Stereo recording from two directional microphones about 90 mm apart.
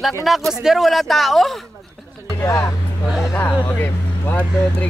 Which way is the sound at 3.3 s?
20° left (ahead or behind).